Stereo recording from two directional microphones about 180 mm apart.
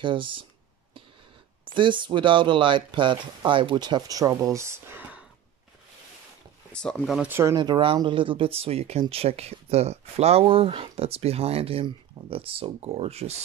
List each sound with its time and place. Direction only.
0.0 s speech: 30° right (ahead or behind)
1.6 s speech: 25° right (ahead or behind); by 5.2 s 10° right (ahead or behind)
6.7 s speech: 5° left (ahead or behind); by 13.4 s 35° right (ahead or behind)